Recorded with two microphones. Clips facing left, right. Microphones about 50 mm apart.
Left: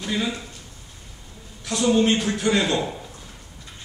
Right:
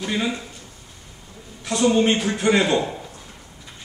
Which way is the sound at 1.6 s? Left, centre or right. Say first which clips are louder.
Right 4 dB; right.